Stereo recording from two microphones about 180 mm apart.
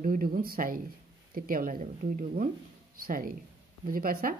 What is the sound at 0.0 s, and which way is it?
Speech, 50° right (ahead or behind).